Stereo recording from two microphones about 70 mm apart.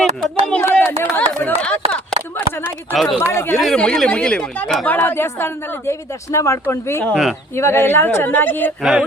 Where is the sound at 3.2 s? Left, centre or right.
Left.